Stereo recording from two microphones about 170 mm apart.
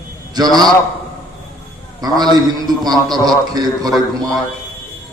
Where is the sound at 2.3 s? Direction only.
25° right (ahead or behind).